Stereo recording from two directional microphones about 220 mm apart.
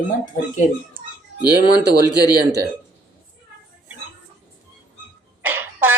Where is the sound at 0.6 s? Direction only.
35° left (ahead or behind).